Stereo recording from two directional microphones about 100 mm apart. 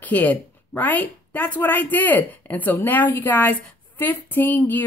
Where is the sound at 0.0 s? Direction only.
15° left (ahead or behind).